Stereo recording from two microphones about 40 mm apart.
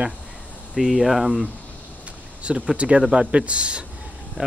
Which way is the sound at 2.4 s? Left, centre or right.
Right.